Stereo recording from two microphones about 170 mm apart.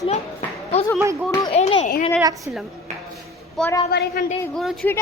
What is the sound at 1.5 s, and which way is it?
Speech, 40° left (ahead or behind).